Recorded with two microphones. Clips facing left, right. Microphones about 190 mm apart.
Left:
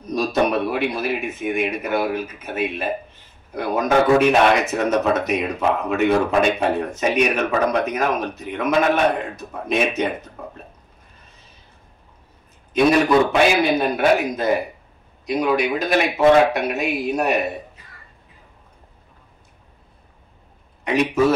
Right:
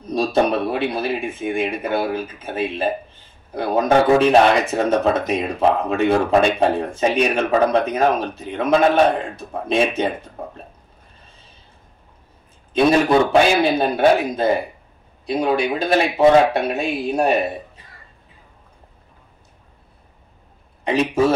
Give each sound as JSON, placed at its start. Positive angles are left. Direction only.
{"t": 0.1, "sound": "speech", "side_deg": -30}
{"t": 13.3, "sound": "speech", "side_deg": -30}
{"t": 20.8, "sound": "a man's voice", "side_deg": -30}